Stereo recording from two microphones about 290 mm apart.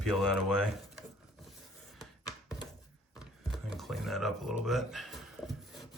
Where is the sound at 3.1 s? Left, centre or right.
Centre.